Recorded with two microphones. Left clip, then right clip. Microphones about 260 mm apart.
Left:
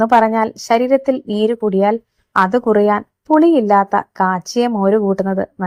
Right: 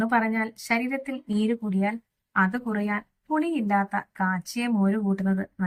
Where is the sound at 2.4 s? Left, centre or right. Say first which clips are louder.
Left 13 dB; left.